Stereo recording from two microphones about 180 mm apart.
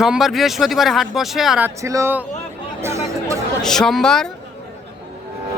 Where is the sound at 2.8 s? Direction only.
15° right (ahead or behind).